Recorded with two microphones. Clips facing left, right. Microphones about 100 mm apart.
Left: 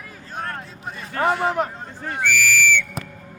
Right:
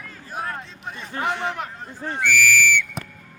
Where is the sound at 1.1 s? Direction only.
45° left (ahead or behind).